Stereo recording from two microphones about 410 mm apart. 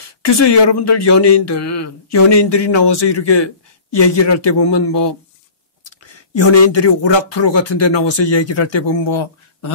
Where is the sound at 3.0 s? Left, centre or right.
Left.